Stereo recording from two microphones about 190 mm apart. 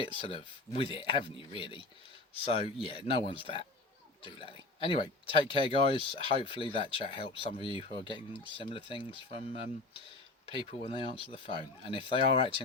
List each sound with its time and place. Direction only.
0.0 s speech: 30° left (ahead or behind)